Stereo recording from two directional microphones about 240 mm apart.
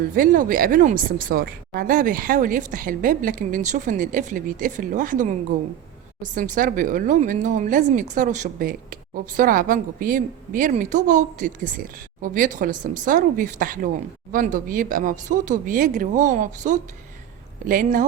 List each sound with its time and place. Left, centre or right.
0.2 s speech: right